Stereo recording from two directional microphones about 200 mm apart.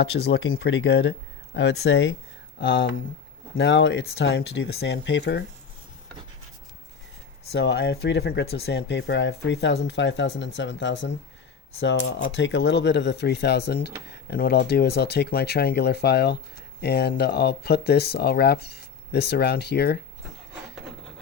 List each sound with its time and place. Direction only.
0.0 s speech: 55° left (ahead or behind); by 2.1 s 75° left (ahead or behind)
2.6 s speech: 60° left (ahead or behind)
7.5 s speech: 60° left (ahead or behind)